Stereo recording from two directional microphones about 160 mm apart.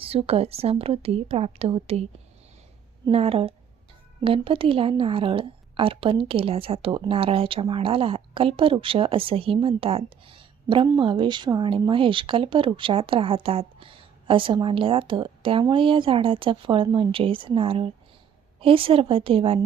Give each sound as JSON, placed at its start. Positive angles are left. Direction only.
{"t": 0.0, "sound": "a woman's voice", "side_deg": -35}
{"t": 3.1, "sound": "a woman's voice", "side_deg": -40}